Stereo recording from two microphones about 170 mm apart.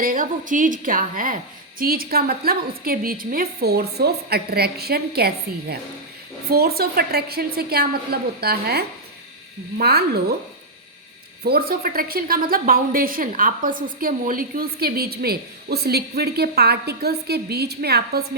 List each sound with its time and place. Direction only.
0.0 s a woman's voice: 55° right (ahead or behind); by 10.3 s 70° right (ahead or behind)
11.4 s a woman's voice: 60° right (ahead or behind)